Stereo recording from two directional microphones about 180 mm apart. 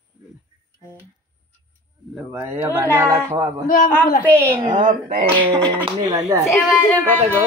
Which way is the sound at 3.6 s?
50° left (ahead or behind).